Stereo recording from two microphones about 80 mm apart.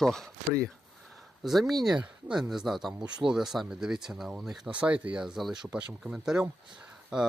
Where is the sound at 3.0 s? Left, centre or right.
Right.